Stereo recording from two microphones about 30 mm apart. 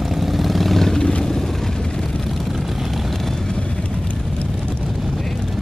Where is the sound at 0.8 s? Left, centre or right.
Centre.